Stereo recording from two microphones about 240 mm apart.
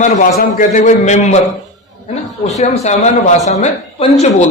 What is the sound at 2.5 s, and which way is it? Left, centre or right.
Speech, left.